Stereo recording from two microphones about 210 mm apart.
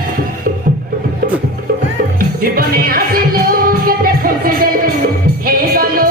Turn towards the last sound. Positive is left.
turn(degrees=-45)  # may be behind; listen again after turning